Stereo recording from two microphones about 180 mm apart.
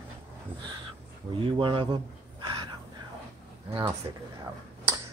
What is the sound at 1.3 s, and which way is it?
Speech, 30° right (ahead or behind).